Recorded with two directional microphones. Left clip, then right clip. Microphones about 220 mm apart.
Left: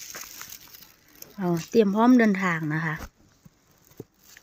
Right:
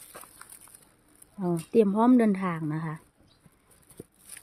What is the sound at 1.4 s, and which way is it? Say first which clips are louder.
Speech: left 2 dB; 5° left (ahead or behind).